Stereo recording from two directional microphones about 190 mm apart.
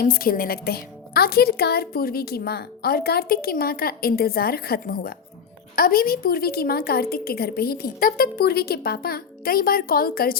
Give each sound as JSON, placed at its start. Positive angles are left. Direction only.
{"t": 0.0, "sound": "speech", "side_deg": 50}